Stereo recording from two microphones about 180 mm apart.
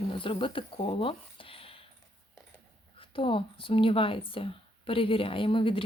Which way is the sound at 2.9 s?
30° left (ahead or behind).